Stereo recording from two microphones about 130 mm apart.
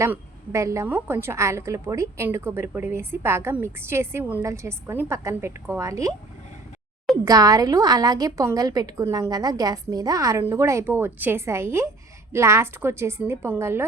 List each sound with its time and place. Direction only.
0.0 s a woman's voice: 20° right (ahead or behind)
7.3 s a woman's voice: 30° right (ahead or behind)